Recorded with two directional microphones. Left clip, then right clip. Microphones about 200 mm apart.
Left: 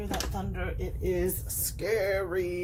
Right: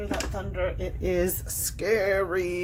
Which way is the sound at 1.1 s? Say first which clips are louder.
Right 3 dB; 55° right (ahead or behind).